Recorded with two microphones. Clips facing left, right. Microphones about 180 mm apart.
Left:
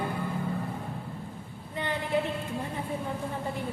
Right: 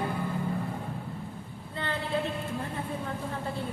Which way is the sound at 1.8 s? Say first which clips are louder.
Left 2 dB; 15° left (ahead or behind).